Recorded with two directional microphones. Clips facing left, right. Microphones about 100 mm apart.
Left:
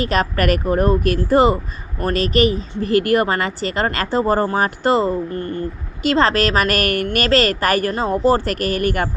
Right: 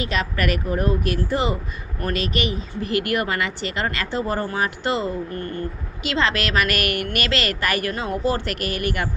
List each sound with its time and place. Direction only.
0.0 s speech: 45° left (ahead or behind)
5.3 s speech: 30° left (ahead or behind)